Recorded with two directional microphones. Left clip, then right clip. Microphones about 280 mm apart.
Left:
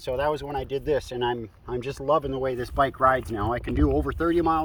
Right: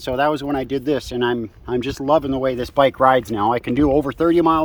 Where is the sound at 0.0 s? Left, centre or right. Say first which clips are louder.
Right 7 dB; centre.